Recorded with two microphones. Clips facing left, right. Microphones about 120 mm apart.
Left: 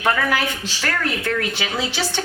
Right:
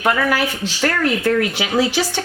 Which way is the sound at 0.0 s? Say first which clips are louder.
Right 3 dB; 10° right (ahead or behind).